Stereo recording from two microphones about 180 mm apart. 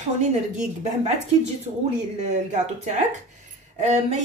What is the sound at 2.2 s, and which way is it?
A woman's voice, 40° right (ahead or behind).